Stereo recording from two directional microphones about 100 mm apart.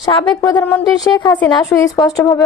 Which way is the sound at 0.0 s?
55° left (ahead or behind).